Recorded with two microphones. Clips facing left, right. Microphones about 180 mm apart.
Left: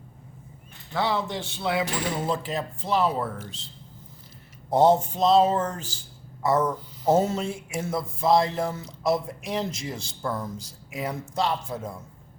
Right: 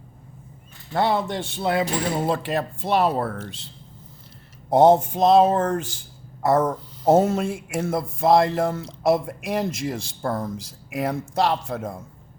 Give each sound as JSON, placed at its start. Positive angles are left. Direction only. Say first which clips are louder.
{"t": 0.9, "sound": "speech", "louder": "right 4 dB", "side_deg": -55}
{"t": 4.8, "sound": "speech", "louder": "right 4 dB", "side_deg": -55}
{"t": 10.8, "sound": "speech", "louder": "right 6 dB", "side_deg": -65}